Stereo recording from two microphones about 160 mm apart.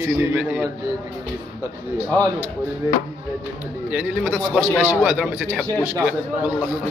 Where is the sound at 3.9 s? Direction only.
5° right (ahead or behind).